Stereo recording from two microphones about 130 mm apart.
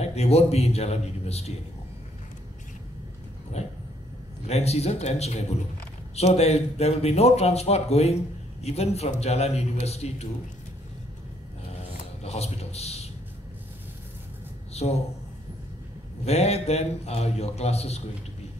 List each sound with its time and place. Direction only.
0.0 s a man's voice: 55° left (ahead or behind)
3.6 s dog: 55° left (ahead or behind)
4.5 s a man's voice: 55° left (ahead or behind)
12.2 s a man's voice: 55° left (ahead or behind)
14.7 s a sound: 55° left (ahead or behind)
16.3 s a man's voice: 55° left (ahead or behind)